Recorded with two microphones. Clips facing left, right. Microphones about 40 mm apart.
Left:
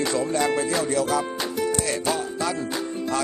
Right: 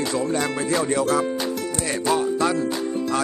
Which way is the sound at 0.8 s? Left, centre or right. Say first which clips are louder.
Right 2 dB; centre.